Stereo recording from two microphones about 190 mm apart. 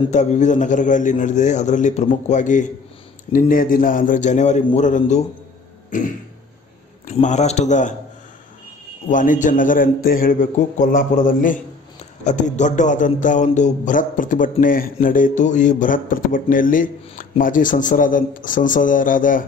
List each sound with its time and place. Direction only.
0.1 s a man's voice: 40° left (ahead or behind)
5.9 s a sound: 40° left (ahead or behind)
7.1 s a man's voice: 40° left (ahead or behind)
9.1 s speech: 45° left (ahead or behind)